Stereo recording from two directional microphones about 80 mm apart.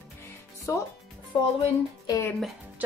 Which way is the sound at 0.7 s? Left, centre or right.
Left.